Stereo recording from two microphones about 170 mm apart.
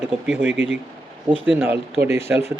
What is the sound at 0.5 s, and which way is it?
Speech, 90° right.